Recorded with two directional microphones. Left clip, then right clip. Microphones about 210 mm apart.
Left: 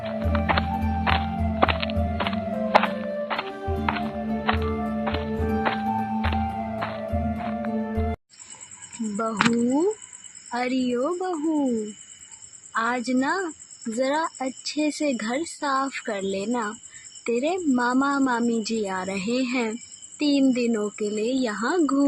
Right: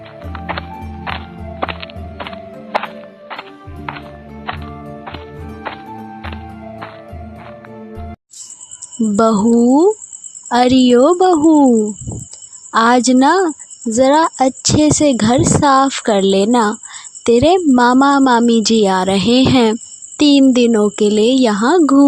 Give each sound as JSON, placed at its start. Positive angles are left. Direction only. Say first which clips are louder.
{"t": 0.0, "sound": "music", "louder": "left 2 dB", "side_deg": 0}
{"t": 9.1, "sound": "a woman's voice", "louder": "right 11 dB", "side_deg": -50}
{"t": 12.7, "sound": "a woman's voice", "louder": "right 14 dB", "side_deg": -55}